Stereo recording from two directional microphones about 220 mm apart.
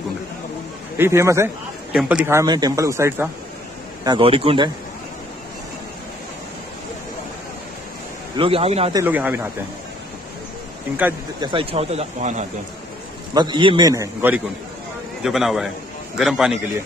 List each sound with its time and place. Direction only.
0.9 s a man's voice: 10° right (ahead or behind)
4.0 s speech: 20° right (ahead or behind)
8.4 s speech: 25° right (ahead or behind)
9.0 s a man's voice: 10° right (ahead or behind)
11.4 s speech: 25° right (ahead or behind)
13.3 s a man's voice: 20° right (ahead or behind); by 16.5 s centre (ahead or behind)